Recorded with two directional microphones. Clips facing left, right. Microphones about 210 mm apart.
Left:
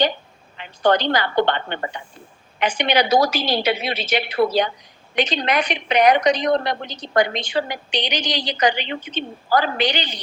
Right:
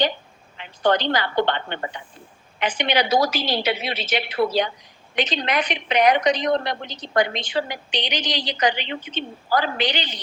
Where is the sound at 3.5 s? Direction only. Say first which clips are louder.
Left 3 dB; 45° left (ahead or behind).